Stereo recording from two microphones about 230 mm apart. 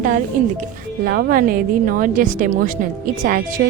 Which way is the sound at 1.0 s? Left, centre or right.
Right.